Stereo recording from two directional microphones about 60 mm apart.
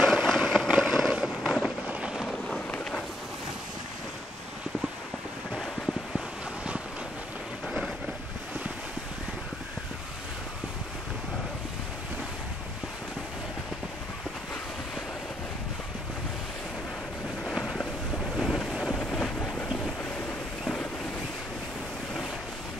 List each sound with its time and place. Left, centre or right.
0.0 s vehicle: centre
0.7 s boat: centre
1.2 s a sound: centre
1.9 s boat: centre
2.1 s vehicle: centre
2.7 s thunder: left
7.6 s boat: centre
18.4 s boat: centre
18.7 s vehicle: centre
18.9 s wind noise: centre